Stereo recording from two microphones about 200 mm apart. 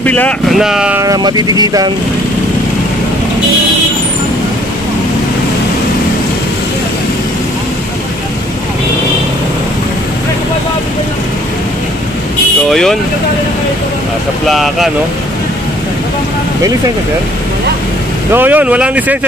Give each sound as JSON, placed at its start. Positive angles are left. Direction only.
{"t": 0.0, "sound": "speech", "side_deg": 5}
{"t": 1.0, "sound": "speech", "side_deg": -20}
{"t": 12.6, "sound": "speech", "side_deg": 0}
{"t": 14.5, "sound": "speech", "side_deg": 0}
{"t": 18.3, "sound": "speech", "side_deg": -10}